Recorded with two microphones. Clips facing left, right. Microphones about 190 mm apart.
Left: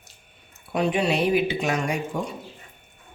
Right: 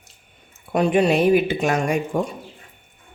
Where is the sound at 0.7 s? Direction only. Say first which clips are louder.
Right 5 dB; 50° right (ahead or behind).